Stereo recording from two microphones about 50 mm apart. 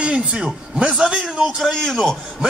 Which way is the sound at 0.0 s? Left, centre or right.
Right.